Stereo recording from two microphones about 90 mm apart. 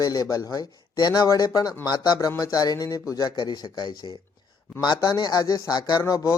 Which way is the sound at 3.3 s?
55° left (ahead or behind).